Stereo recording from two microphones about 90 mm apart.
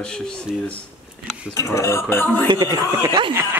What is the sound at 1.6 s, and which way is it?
Speech, 30° left (ahead or behind).